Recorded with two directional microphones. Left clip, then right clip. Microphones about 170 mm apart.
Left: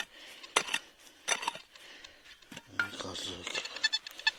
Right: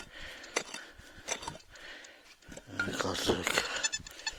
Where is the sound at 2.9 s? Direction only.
35° right (ahead or behind).